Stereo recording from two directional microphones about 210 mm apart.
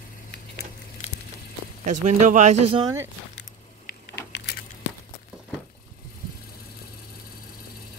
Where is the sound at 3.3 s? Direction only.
55° left (ahead or behind).